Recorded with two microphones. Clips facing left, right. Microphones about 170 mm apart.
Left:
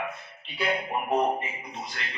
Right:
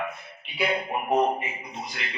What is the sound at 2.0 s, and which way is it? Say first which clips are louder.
Speech: right 2 dB; 15° right (ahead or behind).